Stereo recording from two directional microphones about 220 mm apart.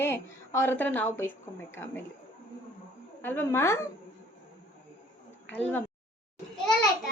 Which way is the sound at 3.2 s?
10° left (ahead or behind).